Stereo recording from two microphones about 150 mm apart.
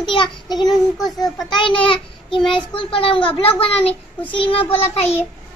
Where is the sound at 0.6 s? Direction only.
Centre (ahead or behind).